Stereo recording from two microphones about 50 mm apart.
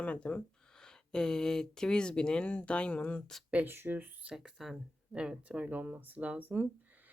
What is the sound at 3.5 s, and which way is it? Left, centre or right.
Speech, right.